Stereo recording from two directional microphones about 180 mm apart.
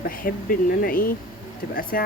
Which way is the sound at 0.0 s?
55° left (ahead or behind).